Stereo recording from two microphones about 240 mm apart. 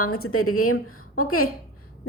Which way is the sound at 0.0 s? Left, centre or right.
Left.